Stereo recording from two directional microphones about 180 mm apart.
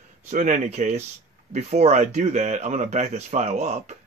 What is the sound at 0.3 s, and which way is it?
Speech, 45° right (ahead or behind).